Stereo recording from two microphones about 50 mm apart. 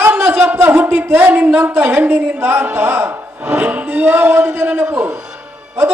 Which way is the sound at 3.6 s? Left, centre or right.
Right.